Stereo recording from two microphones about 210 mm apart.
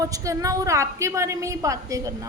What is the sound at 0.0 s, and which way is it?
A woman's voice, 15° right (ahead or behind).